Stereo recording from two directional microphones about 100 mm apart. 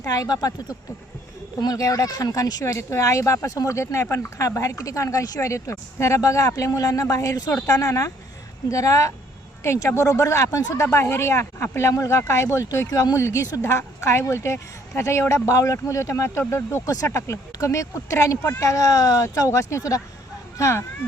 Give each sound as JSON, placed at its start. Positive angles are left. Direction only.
{"t": 0.0, "sound": "speech", "side_deg": 35}